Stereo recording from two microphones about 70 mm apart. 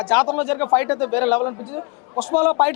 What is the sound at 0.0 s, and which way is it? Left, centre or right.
A man's voice, left.